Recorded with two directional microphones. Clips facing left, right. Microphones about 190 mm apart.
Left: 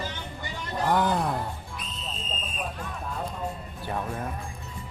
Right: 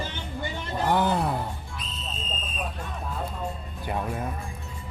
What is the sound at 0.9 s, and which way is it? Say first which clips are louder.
Speech: right 1 dB; 5° right (ahead or behind).